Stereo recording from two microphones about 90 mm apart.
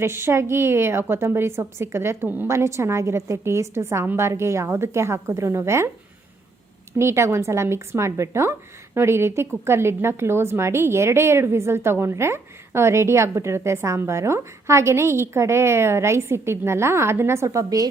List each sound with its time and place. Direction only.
0.0 s a woman's voice: 30° right (ahead or behind)
2.5 s a woman's voice: 30° right (ahead or behind)
6.9 s a woman's voice: 30° right (ahead or behind)